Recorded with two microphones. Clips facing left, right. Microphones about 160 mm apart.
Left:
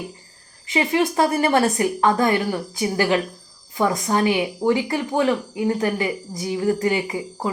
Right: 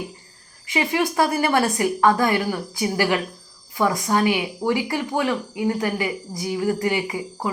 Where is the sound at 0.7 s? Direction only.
25° left (ahead or behind).